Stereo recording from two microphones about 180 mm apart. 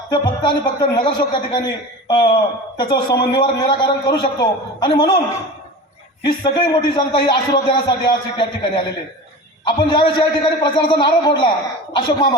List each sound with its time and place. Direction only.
0.1 s a man's voice: 25° left (ahead or behind)
6.4 s a man's voice: 25° left (ahead or behind)